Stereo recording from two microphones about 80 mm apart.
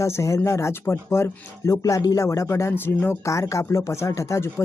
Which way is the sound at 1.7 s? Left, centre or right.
Left.